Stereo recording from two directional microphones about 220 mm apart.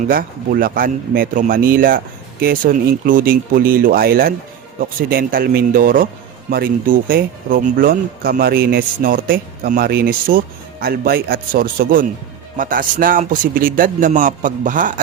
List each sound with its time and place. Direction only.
0.1 s speech: 40° right (ahead or behind)